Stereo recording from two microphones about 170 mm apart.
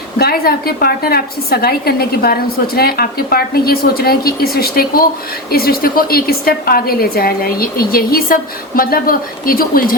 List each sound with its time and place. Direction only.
0.2 s a woman's voice: 65° left (ahead or behind)